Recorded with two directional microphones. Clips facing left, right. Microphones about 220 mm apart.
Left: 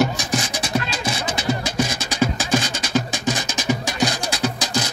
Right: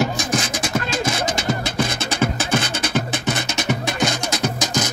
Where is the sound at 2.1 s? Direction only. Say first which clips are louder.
Left 2 dB; 60° right (ahead or behind).